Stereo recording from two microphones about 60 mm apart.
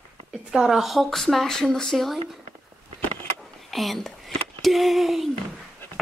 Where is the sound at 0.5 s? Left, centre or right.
Centre.